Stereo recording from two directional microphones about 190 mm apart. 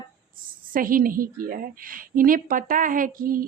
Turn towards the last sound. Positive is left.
turn(degrees=-50)  # may be behind; listen again after turning